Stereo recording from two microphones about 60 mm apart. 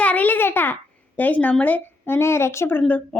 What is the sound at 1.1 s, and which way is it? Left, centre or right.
A woman's voice, left.